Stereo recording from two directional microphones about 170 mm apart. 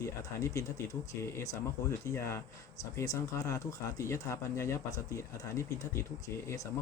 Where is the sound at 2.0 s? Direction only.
15° left (ahead or behind).